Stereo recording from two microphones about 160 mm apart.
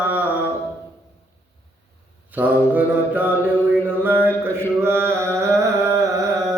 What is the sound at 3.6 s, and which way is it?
Music, 10° right (ahead or behind).